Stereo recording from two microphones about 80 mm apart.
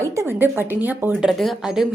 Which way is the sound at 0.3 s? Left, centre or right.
Right.